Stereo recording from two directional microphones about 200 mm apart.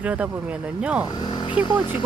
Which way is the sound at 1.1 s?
20° left (ahead or behind).